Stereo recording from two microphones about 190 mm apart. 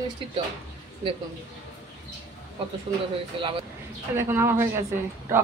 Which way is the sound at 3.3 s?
25° right (ahead or behind).